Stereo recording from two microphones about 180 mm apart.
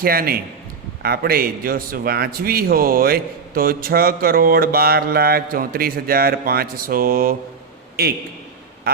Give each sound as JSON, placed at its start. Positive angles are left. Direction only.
{"t": 0.0, "sound": "a man's voice", "side_deg": -55}